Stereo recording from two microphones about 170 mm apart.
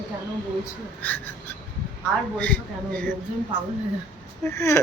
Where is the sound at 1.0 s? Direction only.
10° left (ahead or behind).